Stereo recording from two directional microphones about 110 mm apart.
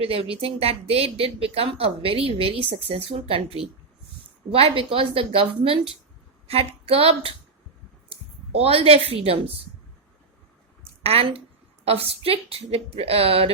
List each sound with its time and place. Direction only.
0.0 s speech: 60° right (ahead or behind)
11.0 s speech: 65° right (ahead or behind)